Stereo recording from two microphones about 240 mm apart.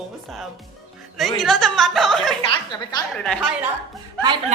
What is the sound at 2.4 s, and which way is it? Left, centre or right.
Speech, centre.